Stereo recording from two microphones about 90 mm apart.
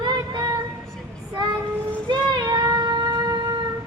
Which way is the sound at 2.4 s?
45° right (ahead or behind).